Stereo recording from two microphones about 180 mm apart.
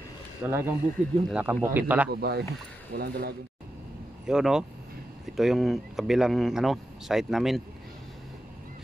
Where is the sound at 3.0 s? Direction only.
60° right (ahead or behind).